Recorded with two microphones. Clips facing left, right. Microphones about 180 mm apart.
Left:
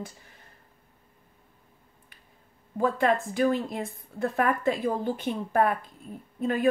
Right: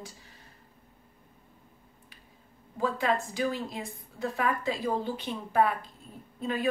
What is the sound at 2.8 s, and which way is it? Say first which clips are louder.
Speech: left 4 dB; 55° left (ahead or behind).